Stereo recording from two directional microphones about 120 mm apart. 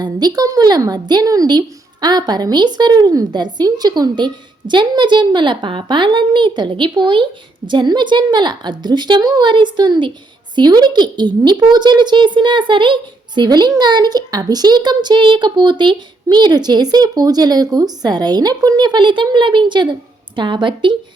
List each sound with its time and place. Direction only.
0.0 s a woman's voice: 35° right (ahead or behind)